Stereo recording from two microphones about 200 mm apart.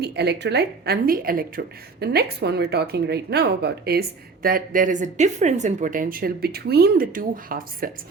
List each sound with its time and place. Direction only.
0.0 s a woman's voice: 55° right (ahead or behind)